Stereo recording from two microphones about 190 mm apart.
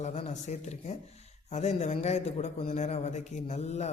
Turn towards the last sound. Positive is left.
turn(degrees=35)  # may be behind; listen again after turning